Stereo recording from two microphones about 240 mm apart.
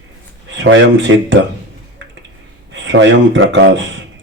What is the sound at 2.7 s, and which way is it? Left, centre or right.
Speech, right.